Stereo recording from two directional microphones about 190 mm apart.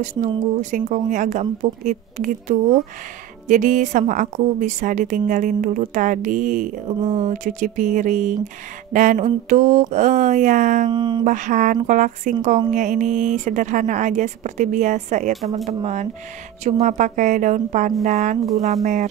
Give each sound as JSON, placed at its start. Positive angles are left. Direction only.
{"t": 0.6, "sound": "a woman's voice", "side_deg": -40}
{"t": 10.9, "sound": "speech", "side_deg": -25}
{"t": 11.2, "sound": "speech", "side_deg": -40}